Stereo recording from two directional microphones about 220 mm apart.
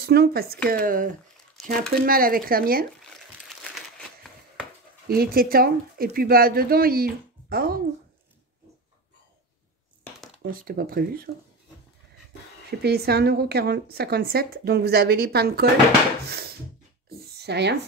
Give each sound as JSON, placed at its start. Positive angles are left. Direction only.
{"t": 0.0, "sound": "speech", "side_deg": -45}
{"t": 5.0, "sound": "speech", "side_deg": -45}
{"t": 10.4, "sound": "speech", "side_deg": -40}
{"t": 12.8, "sound": "speech", "side_deg": -45}
{"t": 16.3, "sound": "a sound", "side_deg": -45}